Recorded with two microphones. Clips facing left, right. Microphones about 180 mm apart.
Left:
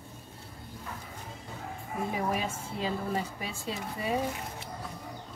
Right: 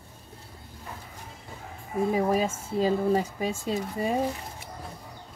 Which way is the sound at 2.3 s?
40° right (ahead or behind).